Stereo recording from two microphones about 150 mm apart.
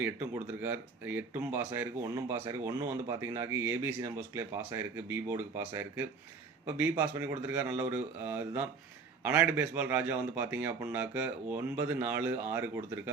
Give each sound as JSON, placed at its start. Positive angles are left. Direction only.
{"t": 0.0, "sound": "speech", "side_deg": -10}